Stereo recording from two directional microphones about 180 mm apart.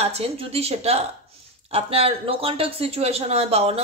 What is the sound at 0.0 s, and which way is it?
Speech, 35° right (ahead or behind).